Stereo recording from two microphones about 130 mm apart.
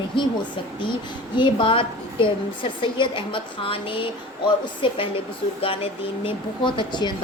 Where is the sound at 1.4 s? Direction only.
40° left (ahead or behind).